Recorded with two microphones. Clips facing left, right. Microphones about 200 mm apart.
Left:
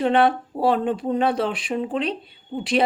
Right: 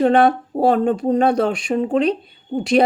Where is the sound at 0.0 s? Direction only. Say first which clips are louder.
Right 4 dB; 45° right (ahead or behind).